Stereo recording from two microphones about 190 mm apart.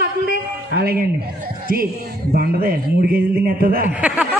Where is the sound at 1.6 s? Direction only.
50° right (ahead or behind).